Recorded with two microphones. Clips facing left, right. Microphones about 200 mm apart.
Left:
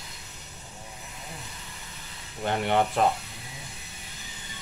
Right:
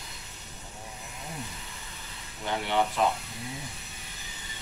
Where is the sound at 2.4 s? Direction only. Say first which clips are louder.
Left 3 dB; 55° left (ahead or behind).